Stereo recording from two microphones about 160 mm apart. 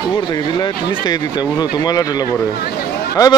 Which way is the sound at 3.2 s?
20° left (ahead or behind).